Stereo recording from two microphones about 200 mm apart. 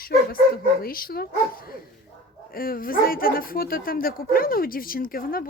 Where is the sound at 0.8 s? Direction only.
45° left (ahead or behind).